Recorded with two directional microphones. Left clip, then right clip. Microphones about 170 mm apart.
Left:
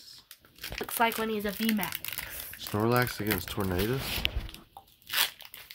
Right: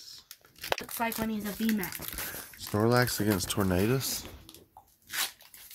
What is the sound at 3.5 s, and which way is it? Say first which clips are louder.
Speech: right 2 dB; 65° right (ahead or behind).